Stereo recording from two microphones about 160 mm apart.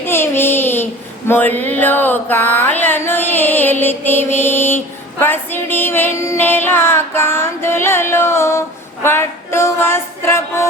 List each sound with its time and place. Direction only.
0.0 s child singing: 15° left (ahead or behind)
1.3 s mantra: 10° left (ahead or behind)
5.2 s music: 15° left (ahead or behind)